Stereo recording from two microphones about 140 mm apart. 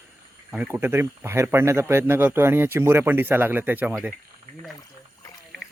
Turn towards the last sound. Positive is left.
turn(degrees=-15)  # may be behind; listen again after turning